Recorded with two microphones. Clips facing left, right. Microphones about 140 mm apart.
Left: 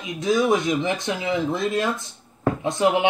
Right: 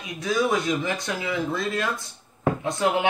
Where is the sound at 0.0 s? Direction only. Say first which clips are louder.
Left 3 dB; 20° left (ahead or behind).